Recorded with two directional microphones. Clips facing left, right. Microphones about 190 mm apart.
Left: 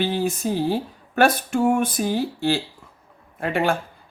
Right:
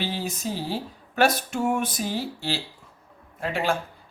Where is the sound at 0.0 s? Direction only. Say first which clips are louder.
Left 7 dB; 55° left (ahead or behind).